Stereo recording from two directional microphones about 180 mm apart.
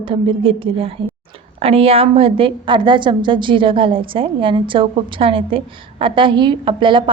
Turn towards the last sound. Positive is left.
turn(degrees=-30)  # may be behind; listen again after turning